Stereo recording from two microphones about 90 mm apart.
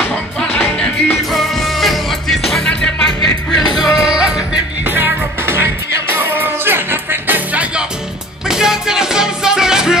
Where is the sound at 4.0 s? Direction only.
10° right (ahead or behind).